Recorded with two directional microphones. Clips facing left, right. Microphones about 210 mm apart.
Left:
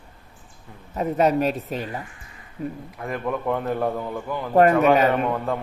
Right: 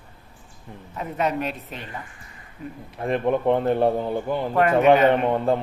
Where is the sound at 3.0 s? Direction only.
30° right (ahead or behind).